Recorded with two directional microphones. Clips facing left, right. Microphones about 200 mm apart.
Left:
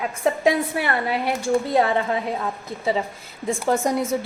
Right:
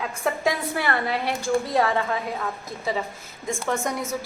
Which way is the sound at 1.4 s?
25° left (ahead or behind).